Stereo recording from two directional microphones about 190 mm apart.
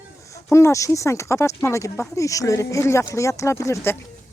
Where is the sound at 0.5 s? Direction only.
15° left (ahead or behind).